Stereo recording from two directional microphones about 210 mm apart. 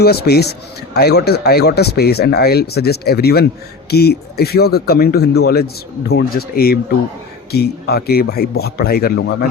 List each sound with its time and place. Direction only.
0.0 s speech: 50° left (ahead or behind)